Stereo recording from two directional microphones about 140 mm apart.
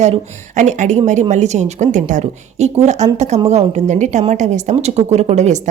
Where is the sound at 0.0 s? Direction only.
55° right (ahead or behind).